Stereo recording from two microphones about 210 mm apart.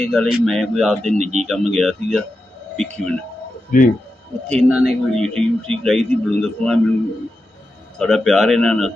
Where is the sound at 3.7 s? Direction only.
40° left (ahead or behind).